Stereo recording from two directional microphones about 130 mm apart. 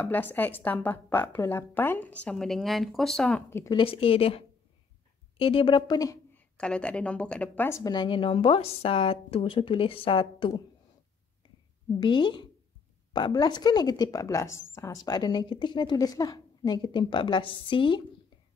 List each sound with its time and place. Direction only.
0.0 s a woman's voice: 15° left (ahead or behind)
3.4 s a woman's voice: 20° left (ahead or behind)
3.7 s a woman's voice: 45° left (ahead or behind)
6.3 s a woman's voice: 10° left (ahead or behind)
7.8 s a woman's voice: 35° left (ahead or behind)
12.0 s a woman's voice: 40° left (ahead or behind)